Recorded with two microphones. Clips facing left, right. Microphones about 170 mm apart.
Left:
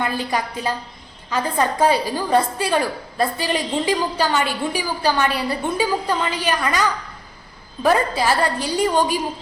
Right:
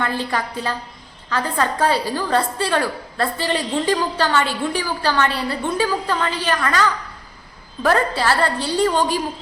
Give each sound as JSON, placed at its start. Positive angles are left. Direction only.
{"t": 0.0, "sound": "a woman's voice", "side_deg": 15}